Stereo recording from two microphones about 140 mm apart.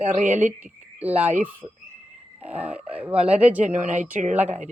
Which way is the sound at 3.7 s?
60° right (ahead or behind).